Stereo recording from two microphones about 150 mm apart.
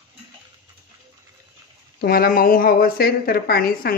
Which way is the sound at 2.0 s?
85° left.